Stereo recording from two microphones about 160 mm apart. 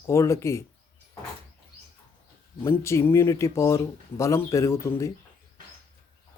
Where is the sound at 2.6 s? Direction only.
15° left (ahead or behind).